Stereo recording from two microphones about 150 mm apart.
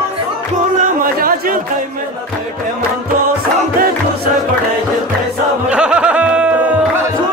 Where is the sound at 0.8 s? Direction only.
70° right (ahead or behind).